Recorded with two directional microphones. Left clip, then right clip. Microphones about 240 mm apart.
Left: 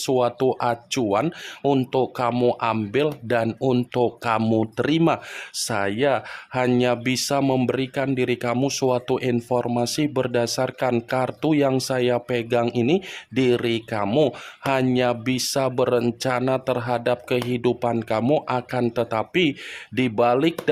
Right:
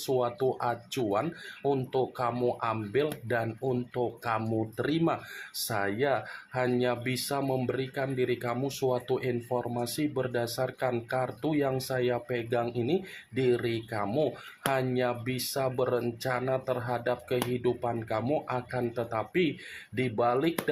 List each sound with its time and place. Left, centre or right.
0.0 s speech: left